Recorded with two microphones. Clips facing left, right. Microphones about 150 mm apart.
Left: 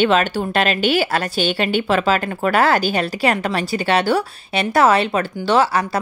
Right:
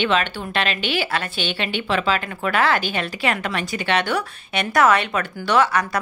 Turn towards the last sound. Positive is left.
turn(degrees=30)  # may be behind; listen again after turning